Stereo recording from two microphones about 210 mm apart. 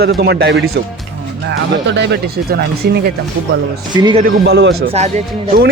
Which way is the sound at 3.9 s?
20° right (ahead or behind).